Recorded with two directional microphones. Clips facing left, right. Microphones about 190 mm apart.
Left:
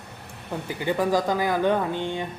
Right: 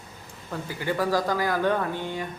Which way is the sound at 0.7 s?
20° left (ahead or behind).